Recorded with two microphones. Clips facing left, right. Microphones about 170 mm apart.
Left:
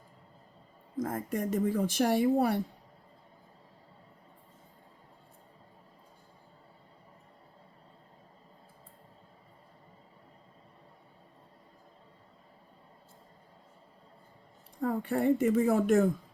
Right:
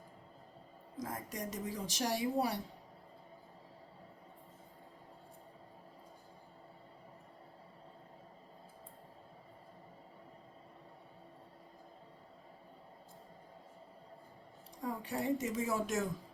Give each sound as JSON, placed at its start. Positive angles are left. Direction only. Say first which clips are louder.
{"t": 0.9, "sound": "speech", "louder": "left 9 dB", "side_deg": 50}
{"t": 14.8, "sound": "speech", "louder": "left 9 dB", "side_deg": 55}